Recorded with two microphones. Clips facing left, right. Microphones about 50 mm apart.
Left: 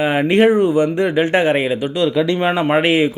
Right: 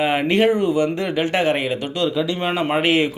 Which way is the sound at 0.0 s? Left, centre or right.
Centre.